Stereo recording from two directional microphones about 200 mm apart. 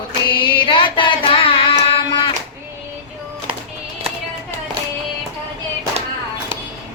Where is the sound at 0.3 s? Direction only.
25° left (ahead or behind).